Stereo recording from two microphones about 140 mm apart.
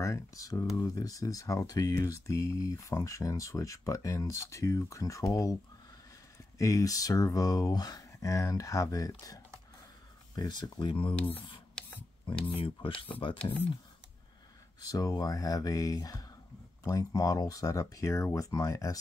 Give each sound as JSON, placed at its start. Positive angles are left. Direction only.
{"t": 0.0, "sound": "speech", "side_deg": 20}
{"t": 6.6, "sound": "speech", "side_deg": 25}
{"t": 14.9, "sound": "speech", "side_deg": 25}